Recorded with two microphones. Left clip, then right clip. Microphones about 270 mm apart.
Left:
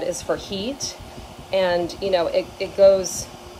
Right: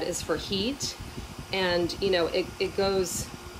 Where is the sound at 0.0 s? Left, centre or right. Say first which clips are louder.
Left 5 dB; centre.